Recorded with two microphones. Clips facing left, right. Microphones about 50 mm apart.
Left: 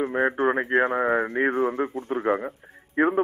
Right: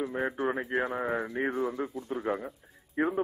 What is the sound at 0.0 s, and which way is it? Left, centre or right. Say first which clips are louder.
A man's voice: left 8 dB; left.